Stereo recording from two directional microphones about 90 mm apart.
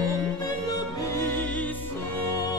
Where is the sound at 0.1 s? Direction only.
45° left (ahead or behind).